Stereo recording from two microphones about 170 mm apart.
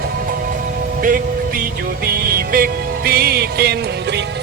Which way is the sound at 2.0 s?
60° right (ahead or behind).